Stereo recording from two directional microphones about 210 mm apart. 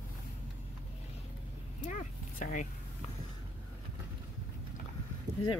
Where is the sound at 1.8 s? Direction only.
35° left (ahead or behind).